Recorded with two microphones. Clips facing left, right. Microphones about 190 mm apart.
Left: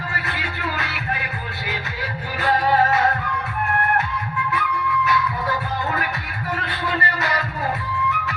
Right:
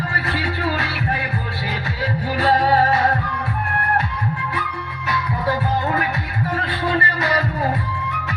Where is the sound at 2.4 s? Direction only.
30° right (ahead or behind).